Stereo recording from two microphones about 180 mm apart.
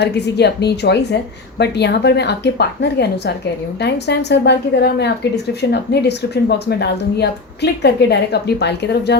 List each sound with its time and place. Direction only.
0.0 s speech: 70° left (ahead or behind)